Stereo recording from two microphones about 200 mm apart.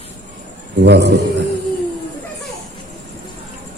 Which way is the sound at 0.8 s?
60° right (ahead or behind).